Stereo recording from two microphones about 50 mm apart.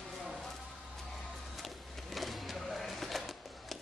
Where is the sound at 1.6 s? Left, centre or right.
Centre.